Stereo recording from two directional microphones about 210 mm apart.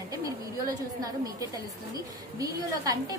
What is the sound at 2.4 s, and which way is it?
Speech, 15° right (ahead or behind).